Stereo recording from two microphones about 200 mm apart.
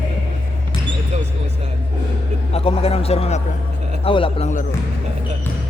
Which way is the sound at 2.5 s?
30° left (ahead or behind).